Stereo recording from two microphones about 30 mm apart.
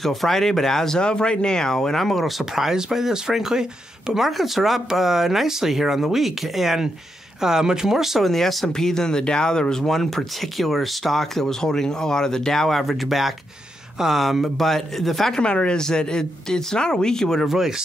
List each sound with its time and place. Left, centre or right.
0.0 s speech: centre
0.9 s speech: left; by 2.2 s centre
2.2 s speech: centre
7.4 s speech: centre
8.2 s speech: centre
8.7 s speech: centre
9.9 s speech: centre
11.4 s speech: centre
12.8 s speech: centre
15.4 s speech: left
15.8 s speech: left
17.5 s speech: centre